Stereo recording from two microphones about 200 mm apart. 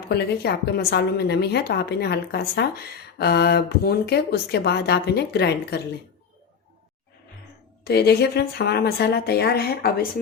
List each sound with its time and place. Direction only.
0.1 s speech: 55° left (ahead or behind)
7.9 s speech: 55° left (ahead or behind)